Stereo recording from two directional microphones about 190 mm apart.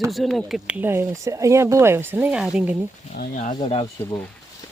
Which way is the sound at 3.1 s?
40° left (ahead or behind).